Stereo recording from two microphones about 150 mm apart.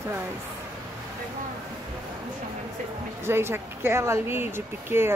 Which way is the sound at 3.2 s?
15° right (ahead or behind).